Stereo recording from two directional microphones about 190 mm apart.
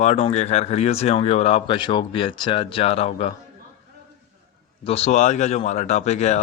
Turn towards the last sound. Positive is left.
turn(degrees=35)  # may be behind; listen again after turning